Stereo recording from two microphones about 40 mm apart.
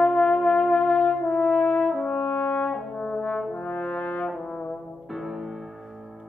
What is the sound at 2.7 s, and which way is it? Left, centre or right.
Brass instrument, left.